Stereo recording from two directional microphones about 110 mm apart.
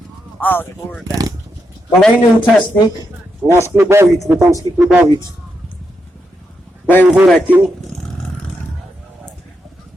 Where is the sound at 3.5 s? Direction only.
25° right (ahead or behind).